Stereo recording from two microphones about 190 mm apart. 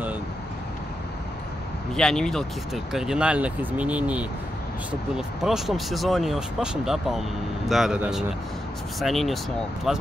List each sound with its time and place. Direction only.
2.0 s speech: 5° left (ahead or behind)